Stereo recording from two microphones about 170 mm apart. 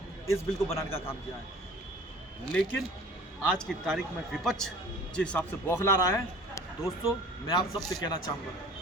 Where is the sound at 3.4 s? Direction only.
5° left (ahead or behind).